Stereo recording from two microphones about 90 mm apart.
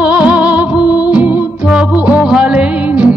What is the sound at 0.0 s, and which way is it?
Music, 10° right (ahead or behind).